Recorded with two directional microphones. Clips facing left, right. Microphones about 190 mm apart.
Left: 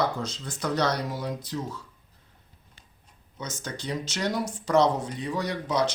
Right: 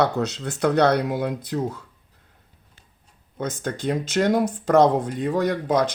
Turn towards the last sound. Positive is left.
turn(degrees=-50)  # may be behind; listen again after turning